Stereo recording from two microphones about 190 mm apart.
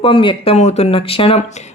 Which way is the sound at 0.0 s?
25° left (ahead or behind).